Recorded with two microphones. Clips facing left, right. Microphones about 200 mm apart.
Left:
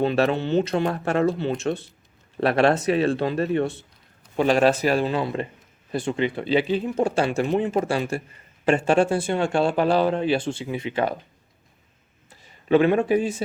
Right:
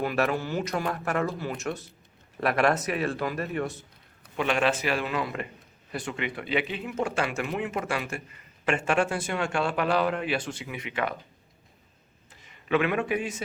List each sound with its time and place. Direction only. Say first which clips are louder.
0.0 s a man's voice: left 6 dB; 25° left (ahead or behind)
12.4 s a man's voice: left 7 dB; 35° left (ahead or behind)